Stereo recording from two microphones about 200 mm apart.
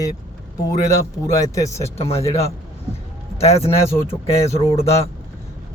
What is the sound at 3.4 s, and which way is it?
Speech, 30° left (ahead or behind).